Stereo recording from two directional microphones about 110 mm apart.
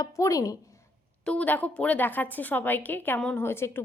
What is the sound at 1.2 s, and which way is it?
A woman's voice, 10° left (ahead or behind).